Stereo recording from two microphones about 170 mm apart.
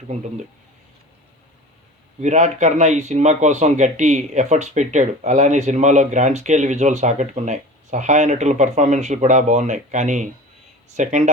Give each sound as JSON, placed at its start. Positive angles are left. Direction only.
{"t": 2.2, "sound": "speech", "side_deg": -45}